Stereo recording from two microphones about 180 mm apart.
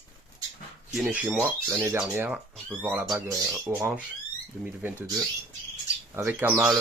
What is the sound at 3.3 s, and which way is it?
Speech, 20° right (ahead or behind).